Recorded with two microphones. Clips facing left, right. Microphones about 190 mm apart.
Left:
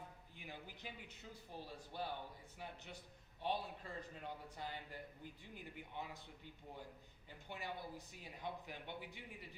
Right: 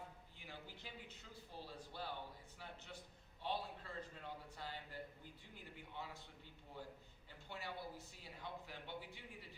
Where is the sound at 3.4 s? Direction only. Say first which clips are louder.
Left 2 dB; 15° left (ahead or behind).